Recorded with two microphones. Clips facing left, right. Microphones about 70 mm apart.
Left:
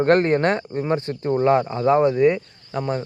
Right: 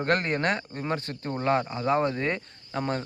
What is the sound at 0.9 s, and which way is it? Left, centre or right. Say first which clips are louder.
Speech: left 9 dB; left.